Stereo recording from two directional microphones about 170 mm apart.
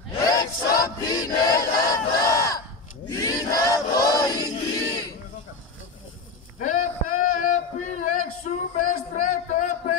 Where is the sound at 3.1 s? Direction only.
20° left (ahead or behind).